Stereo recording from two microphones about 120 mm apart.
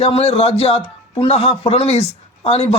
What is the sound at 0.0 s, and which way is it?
Speech, 60° left (ahead or behind).